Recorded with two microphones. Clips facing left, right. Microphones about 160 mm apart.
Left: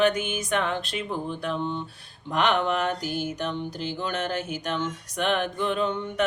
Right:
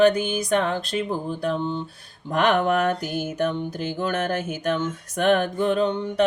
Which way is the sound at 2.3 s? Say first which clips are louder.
Right 4 dB; 50° right (ahead or behind).